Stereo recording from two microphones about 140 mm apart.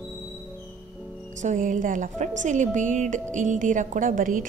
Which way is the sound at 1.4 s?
65° right (ahead or behind).